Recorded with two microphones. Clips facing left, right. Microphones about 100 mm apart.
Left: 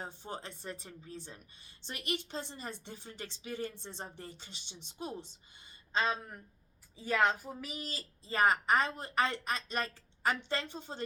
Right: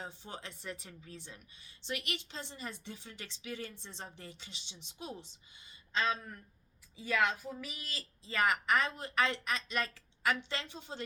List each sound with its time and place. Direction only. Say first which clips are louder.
0.0 s speech: left 3 dB; 40° left (ahead or behind)